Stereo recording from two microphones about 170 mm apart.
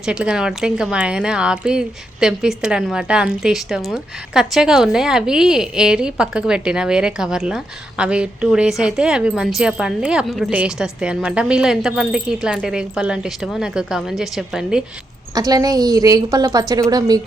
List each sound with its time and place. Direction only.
0.0 s speech: 5° right (ahead or behind)
15.4 s a woman's voice: 20° right (ahead or behind)